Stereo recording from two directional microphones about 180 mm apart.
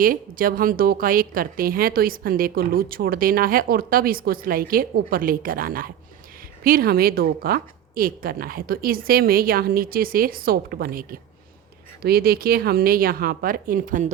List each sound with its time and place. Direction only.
0.0 s a woman's voice: 50° right (ahead or behind)